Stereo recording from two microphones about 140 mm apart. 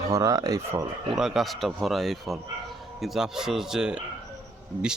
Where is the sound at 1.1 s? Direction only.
5° right (ahead or behind).